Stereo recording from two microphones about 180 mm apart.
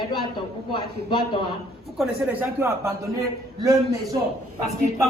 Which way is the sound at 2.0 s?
10° right (ahead or behind).